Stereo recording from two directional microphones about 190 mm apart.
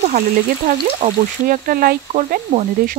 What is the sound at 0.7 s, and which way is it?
Speech, 45° right (ahead or behind).